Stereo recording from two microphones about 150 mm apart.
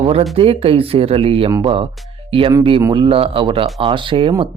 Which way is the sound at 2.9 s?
35° right (ahead or behind).